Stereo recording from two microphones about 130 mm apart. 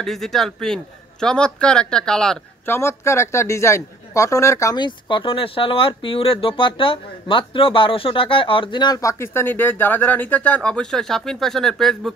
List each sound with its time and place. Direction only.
0.0 s speech: centre (ahead or behind)
2.6 s speech: 20° left (ahead or behind); by 12.1 s 5° left (ahead or behind)